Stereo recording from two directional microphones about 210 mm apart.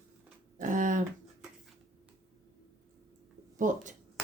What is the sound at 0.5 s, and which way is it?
Speech, 40° right (ahead or behind).